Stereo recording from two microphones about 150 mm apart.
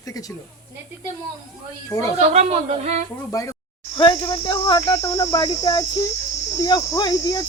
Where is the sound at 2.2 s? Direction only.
45° right (ahead or behind).